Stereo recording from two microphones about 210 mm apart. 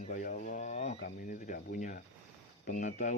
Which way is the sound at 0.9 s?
45° left (ahead or behind).